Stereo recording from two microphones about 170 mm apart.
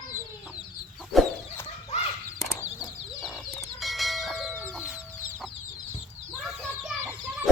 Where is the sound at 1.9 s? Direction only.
40° left (ahead or behind).